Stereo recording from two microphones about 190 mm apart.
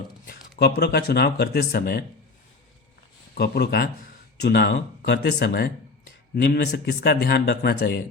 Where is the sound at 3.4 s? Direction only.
60° left (ahead or behind).